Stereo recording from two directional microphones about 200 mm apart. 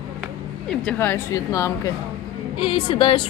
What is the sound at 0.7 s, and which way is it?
A woman's voice, 5° left (ahead or behind).